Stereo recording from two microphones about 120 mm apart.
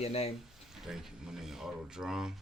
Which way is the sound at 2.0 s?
5° right (ahead or behind).